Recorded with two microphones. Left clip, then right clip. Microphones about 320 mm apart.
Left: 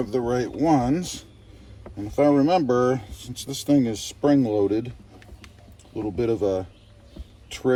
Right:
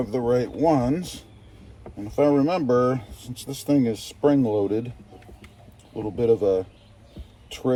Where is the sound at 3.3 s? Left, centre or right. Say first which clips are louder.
Left 3 dB; right.